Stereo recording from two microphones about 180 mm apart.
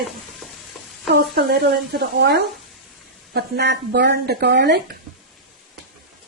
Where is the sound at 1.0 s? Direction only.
60° right (ahead or behind).